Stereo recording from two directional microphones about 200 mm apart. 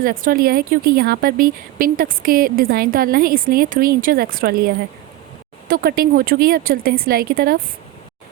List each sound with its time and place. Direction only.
0.0 s speech: 45° right (ahead or behind)